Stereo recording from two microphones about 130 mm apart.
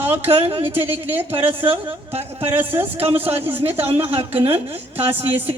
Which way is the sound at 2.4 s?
15° right (ahead or behind).